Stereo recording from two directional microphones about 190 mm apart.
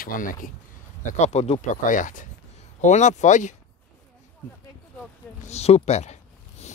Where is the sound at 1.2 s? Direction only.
35° left (ahead or behind).